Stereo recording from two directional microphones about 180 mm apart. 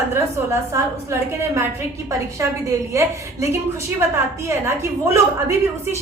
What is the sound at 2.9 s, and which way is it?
A woman's voice, 15° right (ahead or behind).